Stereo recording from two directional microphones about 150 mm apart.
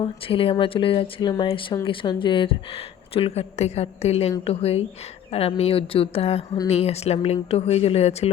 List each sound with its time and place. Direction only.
0.0 s speech: 35° left (ahead or behind)